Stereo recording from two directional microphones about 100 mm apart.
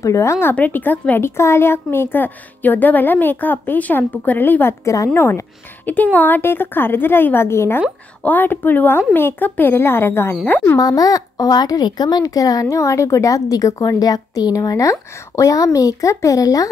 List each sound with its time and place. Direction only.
0.0 s speech: 30° left (ahead or behind)
4.8 s speech: 30° left (ahead or behind)
10.8 s speech: 35° left (ahead or behind)